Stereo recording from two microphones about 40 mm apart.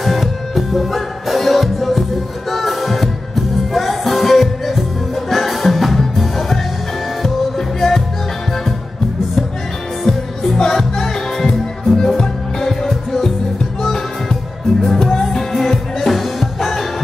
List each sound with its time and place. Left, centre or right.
0.0 s music: centre
10.0 s music: centre
12.8 s music: centre
16.2 s music: centre